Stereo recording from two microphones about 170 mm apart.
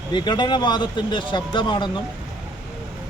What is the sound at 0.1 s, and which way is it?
Speech, 25° left (ahead or behind).